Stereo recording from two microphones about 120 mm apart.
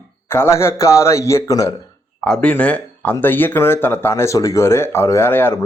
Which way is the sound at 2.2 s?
Centre (ahead or behind).